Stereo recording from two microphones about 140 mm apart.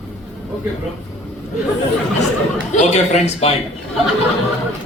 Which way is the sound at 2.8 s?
55° left (ahead or behind).